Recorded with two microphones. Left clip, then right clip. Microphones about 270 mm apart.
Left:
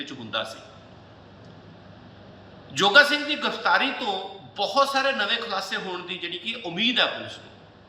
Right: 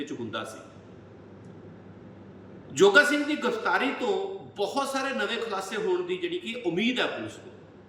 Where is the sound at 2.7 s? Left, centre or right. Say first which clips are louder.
Left 2 dB; centre.